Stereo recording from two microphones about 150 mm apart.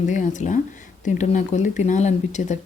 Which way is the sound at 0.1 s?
55° left (ahead or behind).